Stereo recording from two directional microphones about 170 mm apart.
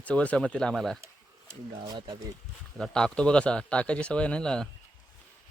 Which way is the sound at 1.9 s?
25° right (ahead or behind).